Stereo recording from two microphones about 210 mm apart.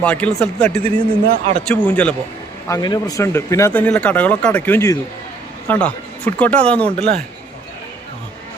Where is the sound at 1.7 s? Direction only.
5° left (ahead or behind).